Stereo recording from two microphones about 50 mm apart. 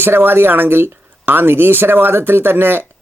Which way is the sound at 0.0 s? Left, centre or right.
Right.